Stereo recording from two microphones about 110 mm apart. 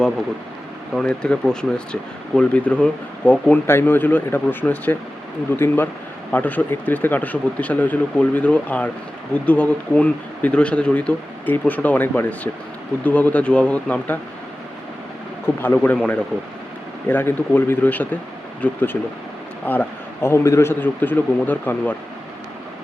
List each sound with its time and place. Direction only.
0.9 s speech: 10° left (ahead or behind)
15.6 s speech: 15° left (ahead or behind)